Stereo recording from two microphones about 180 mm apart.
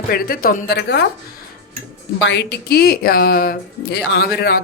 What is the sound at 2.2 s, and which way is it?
Speech, 80° left.